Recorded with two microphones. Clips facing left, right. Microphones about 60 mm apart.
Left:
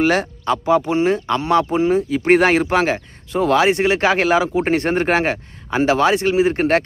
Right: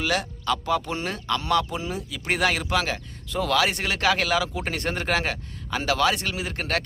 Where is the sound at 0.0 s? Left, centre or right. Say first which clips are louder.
Left 9 dB; left.